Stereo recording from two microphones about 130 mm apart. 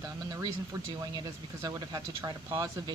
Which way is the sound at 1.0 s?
30° right (ahead or behind).